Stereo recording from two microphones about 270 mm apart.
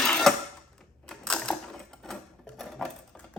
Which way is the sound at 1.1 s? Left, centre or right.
Centre.